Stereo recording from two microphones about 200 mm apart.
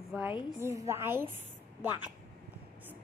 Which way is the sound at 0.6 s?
15° right (ahead or behind).